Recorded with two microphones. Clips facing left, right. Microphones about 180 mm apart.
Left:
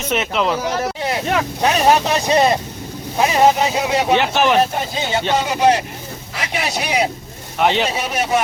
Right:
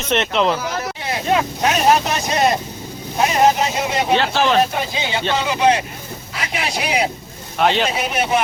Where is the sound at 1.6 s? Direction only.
35° left (ahead or behind).